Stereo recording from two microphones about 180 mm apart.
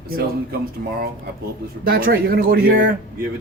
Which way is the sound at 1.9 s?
60° right (ahead or behind).